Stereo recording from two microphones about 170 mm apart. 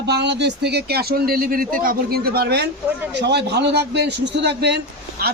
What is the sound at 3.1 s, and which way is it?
A man's voice, 90° right.